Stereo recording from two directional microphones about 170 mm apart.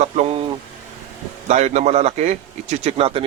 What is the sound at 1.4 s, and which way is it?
A man's voice, 40° right (ahead or behind).